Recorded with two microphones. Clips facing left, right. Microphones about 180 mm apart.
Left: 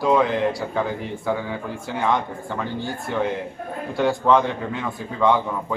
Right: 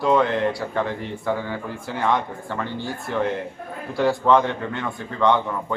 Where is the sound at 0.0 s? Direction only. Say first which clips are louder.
Even; centre (ahead or behind).